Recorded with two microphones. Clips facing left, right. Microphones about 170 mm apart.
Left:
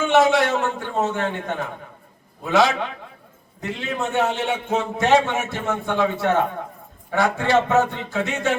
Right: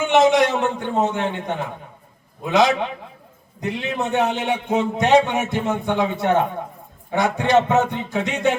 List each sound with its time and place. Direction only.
0.0 s a man's voice: 20° right (ahead or behind)